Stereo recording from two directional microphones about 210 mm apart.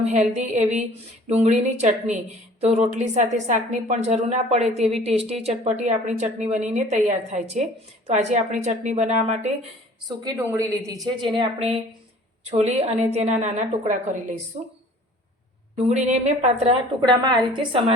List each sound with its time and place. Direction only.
0.0 s a woman's voice: 35° right (ahead or behind)
10.1 s a woman's voice: 15° right (ahead or behind); by 14.3 s 35° right (ahead or behind)
15.9 s a woman's voice: 35° right (ahead or behind)